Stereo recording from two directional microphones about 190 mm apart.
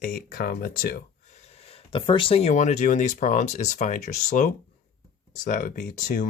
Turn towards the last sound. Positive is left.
turn(degrees=45)  # may be behind; listen again after turning